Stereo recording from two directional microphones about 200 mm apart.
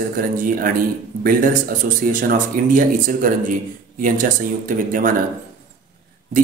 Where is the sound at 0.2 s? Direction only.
45° right (ahead or behind).